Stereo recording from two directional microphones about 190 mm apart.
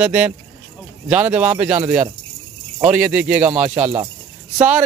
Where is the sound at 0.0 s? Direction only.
5° right (ahead or behind).